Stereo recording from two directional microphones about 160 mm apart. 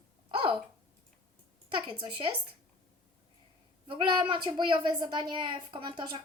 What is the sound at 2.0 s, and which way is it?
Speech, 30° right (ahead or behind).